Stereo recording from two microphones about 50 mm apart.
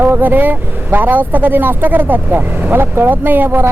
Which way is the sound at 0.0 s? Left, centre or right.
Right.